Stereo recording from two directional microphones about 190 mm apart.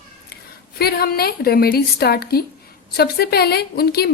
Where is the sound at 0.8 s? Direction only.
55° left (ahead or behind).